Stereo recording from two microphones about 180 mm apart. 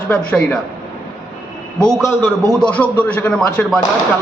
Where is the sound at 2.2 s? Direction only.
5° left (ahead or behind).